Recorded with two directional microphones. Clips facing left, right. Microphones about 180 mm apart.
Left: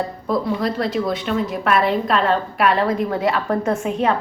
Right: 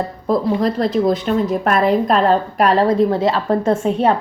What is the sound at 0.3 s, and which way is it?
A woman's voice, 40° right (ahead or behind).